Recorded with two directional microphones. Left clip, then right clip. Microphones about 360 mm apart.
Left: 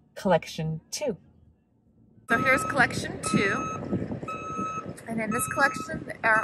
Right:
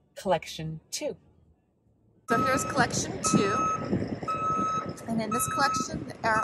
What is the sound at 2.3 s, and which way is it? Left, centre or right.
Speech, centre.